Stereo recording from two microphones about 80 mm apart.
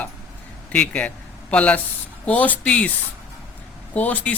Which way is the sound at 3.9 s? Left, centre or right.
Centre.